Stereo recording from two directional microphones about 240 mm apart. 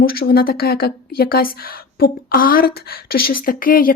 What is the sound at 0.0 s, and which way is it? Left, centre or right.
Speech, left.